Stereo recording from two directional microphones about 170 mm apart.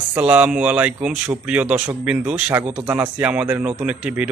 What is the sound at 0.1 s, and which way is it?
A man's voice, 10° right (ahead or behind).